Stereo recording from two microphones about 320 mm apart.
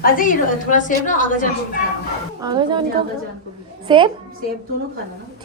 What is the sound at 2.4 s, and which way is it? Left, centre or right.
Speech, centre.